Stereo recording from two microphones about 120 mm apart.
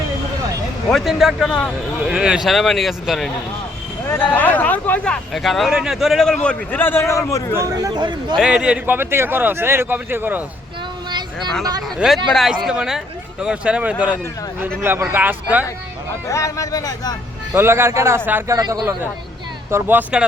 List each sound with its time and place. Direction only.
0.9 s a man's voice: centre (ahead or behind)
2.0 s a man's voice: 5° right (ahead or behind)
4.1 s a man's voice: 15° left (ahead or behind)
7.5 s speech: 30° right (ahead or behind)
8.4 s a man's voice: 5° right (ahead or behind)
11.9 s a man's voice: centre (ahead or behind)
16.3 s speech: 25° left (ahead or behind)
17.5 s a man's voice: 20° right (ahead or behind)
18.6 s speech: 35° right (ahead or behind)
19.7 s a man's voice: 15° right (ahead or behind)